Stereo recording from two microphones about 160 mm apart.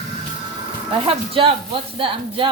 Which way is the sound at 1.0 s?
35° right (ahead or behind).